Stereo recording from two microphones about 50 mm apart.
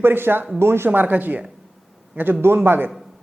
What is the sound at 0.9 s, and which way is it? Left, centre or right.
A man's voice, right.